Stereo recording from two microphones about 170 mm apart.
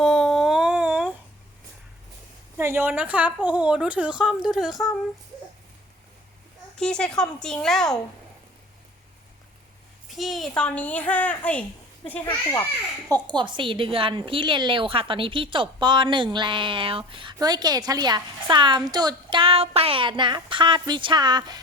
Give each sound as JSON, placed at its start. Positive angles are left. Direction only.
{"t": 0.0, "sound": "a sound", "side_deg": 5}
{"t": 2.6, "sound": "a woman's voice", "side_deg": -15}
{"t": 6.7, "sound": "speech", "side_deg": 5}
{"t": 10.1, "sound": "a woman's voice", "side_deg": 0}
{"t": 13.1, "sound": "a woman's voice", "side_deg": -25}